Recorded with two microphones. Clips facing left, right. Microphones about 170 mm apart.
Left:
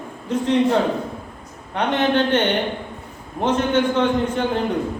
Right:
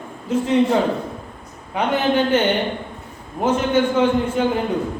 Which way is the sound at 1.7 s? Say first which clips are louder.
Even; 5° right (ahead or behind).